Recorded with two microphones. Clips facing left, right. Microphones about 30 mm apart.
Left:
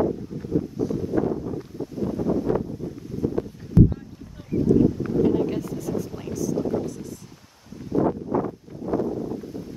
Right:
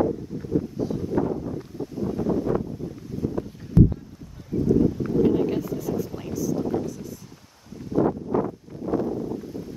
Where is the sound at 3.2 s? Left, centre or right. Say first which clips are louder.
Left 3 dB; left.